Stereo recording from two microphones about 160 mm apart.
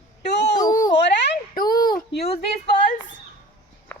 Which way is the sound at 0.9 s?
90° left.